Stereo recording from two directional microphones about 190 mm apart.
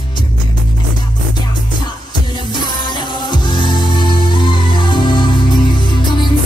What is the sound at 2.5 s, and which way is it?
Music, 25° left (ahead or behind).